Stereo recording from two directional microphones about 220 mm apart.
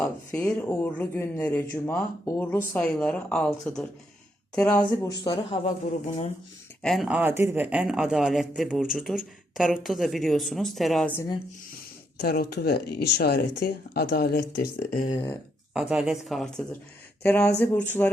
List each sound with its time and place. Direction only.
0.0 s speech: 5° left (ahead or behind)
5.2 s speech: 25° left (ahead or behind)
6.8 s speech: centre (ahead or behind)
12.1 s speech: 45° left (ahead or behind)
14.8 s speech: 30° left (ahead or behind)
15.7 s speech: 5° right (ahead or behind)